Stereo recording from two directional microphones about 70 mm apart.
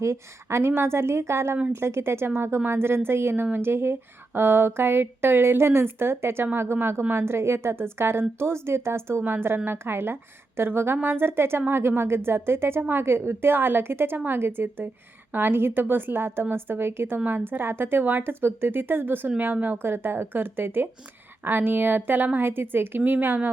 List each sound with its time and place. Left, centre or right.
0.0 s a woman's voice: right